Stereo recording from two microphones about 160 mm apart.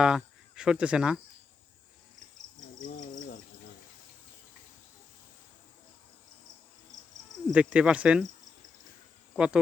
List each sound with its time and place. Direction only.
0.0 s speech: 5° right (ahead or behind)
2.8 s cricket: 60° left (ahead or behind)
7.5 s speech: 5° right (ahead or behind)
9.3 s speech: 5° right (ahead or behind)